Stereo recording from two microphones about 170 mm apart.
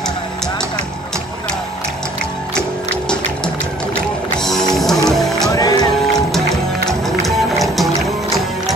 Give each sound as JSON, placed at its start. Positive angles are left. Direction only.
{"t": 4.4, "sound": "music", "side_deg": 0}
{"t": 5.5, "sound": "music", "side_deg": 20}
{"t": 6.9, "sound": "music", "side_deg": 0}